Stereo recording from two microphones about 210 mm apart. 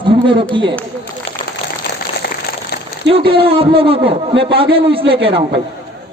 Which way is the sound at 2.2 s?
50° left (ahead or behind).